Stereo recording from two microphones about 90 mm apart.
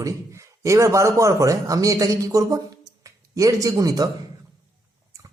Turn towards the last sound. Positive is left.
turn(degrees=-40)  # may be behind; listen again after turning